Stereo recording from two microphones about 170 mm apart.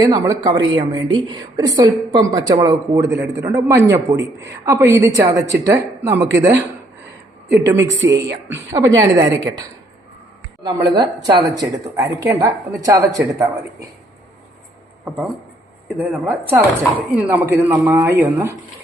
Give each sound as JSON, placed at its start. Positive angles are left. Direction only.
{"t": 0.0, "sound": "a woman's voice", "side_deg": -20}
{"t": 7.6, "sound": "a woman's voice", "side_deg": -15}
{"t": 10.6, "sound": "a woman's voice", "side_deg": -25}
{"t": 16.0, "sound": "speech", "side_deg": -10}